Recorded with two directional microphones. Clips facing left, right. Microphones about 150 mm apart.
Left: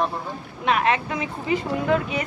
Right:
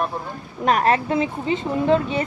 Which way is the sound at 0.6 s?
40° right (ahead or behind).